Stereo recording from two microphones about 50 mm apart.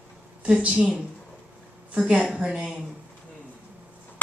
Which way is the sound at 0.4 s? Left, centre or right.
Right.